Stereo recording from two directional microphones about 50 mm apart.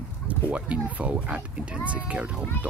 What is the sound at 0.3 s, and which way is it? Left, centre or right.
Speech, right.